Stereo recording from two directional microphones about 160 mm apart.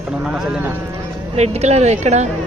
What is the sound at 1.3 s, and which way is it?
Speech, 40° right (ahead or behind).